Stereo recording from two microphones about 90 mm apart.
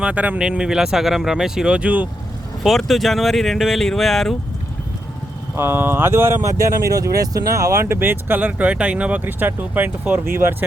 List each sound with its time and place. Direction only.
0.0 s speech: 15° right (ahead or behind)
2.6 s speech: centre (ahead or behind)
5.5 s speech: 25° right (ahead or behind)